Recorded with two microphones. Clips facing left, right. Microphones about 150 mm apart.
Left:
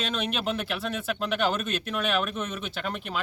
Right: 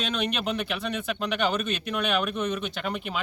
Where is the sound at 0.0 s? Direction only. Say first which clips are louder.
Right 1 dB; centre (ahead or behind).